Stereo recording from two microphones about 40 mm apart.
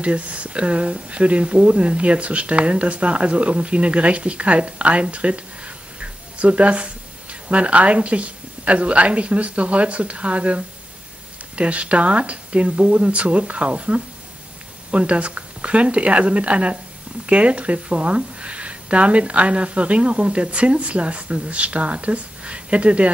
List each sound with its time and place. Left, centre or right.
0.0 s speech: right
5.9 s a sound: right
7.4 s speech: right